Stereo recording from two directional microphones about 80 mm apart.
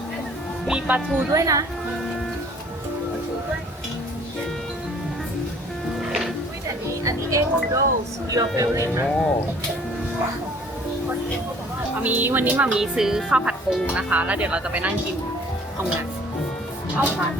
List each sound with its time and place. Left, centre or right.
0.7 s speech: centre
1.3 s speech: right
6.0 s music: centre
7.0 s speech: right
9.0 s speech: centre
12.0 s a woman's voice: right
12.7 s a woman's voice: centre